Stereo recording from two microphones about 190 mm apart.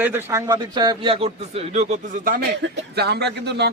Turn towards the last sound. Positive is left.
turn(degrees=-60)  # may be behind; listen again after turning